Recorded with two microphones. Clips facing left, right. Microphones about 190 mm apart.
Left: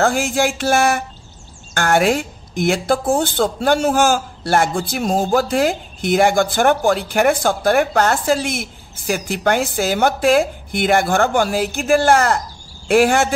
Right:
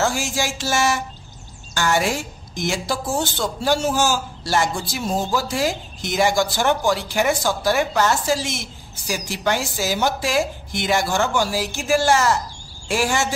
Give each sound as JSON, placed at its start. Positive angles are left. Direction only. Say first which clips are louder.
{"t": 0.0, "sound": "speech", "louder": "left 6 dB", "side_deg": 55}